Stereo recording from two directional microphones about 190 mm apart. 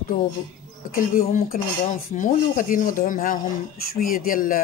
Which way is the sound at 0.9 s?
45° left (ahead or behind).